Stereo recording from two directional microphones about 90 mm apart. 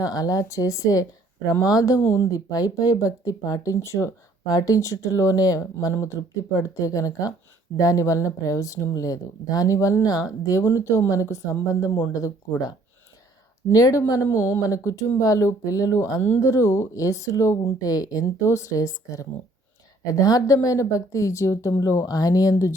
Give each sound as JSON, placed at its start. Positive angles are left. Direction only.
{"t": 0.0, "sound": "speech", "side_deg": 40}